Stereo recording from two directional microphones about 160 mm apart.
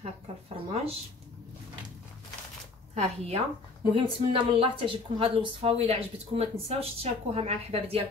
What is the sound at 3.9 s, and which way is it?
A woman's voice, 35° right (ahead or behind).